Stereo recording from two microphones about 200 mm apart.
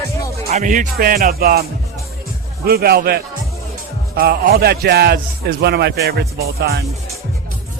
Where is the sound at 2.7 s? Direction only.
50° right (ahead or behind).